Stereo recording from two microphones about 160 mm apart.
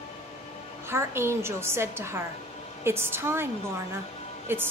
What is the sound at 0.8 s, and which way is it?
A woman's voice, 15° right (ahead or behind).